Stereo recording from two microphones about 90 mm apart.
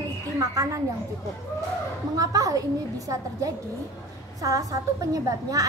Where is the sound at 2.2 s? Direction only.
40° right (ahead or behind).